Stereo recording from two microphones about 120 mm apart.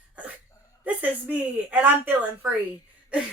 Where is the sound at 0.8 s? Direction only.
15° right (ahead or behind).